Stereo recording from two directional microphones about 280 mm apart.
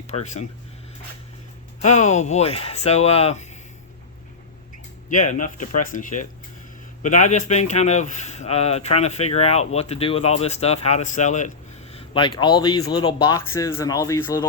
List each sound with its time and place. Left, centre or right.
0.1 s speech: left
1.8 s speech: left
5.0 s speech: left; by 14.4 s centre